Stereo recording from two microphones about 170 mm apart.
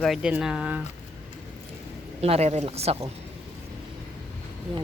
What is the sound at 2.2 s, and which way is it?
Speech, 40° right (ahead or behind).